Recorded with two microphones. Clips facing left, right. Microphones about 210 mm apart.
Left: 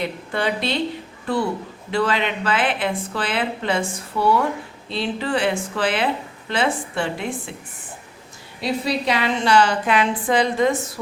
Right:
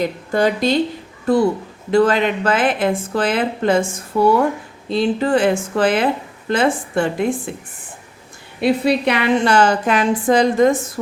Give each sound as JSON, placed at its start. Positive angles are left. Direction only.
{"t": 0.0, "sound": "speech", "side_deg": -40}
{"t": 1.9, "sound": "a woman's voice", "side_deg": -45}
{"t": 8.6, "sound": "a woman's voice", "side_deg": -60}